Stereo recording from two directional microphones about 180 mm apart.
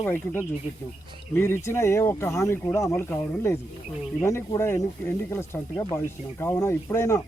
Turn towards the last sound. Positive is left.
turn(degrees=15)  # may be behind; listen again after turning